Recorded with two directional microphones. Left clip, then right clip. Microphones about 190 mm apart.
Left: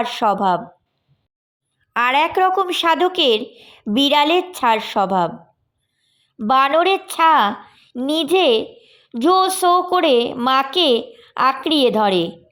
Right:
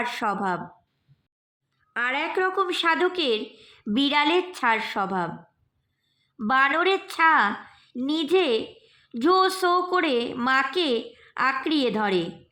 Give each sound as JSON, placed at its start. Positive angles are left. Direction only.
{"t": 0.0, "sound": "a woman's voice", "side_deg": 25}
{"t": 1.9, "sound": "a woman's voice", "side_deg": 45}
{"t": 6.4, "sound": "a woman's voice", "side_deg": 25}